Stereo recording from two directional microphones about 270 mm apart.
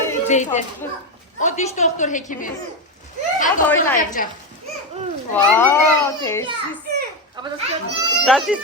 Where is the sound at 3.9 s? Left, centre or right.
Left.